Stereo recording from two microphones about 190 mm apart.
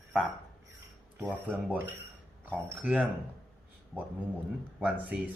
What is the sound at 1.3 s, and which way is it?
Speech, 10° right (ahead or behind).